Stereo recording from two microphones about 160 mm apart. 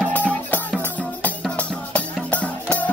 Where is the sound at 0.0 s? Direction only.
10° left (ahead or behind).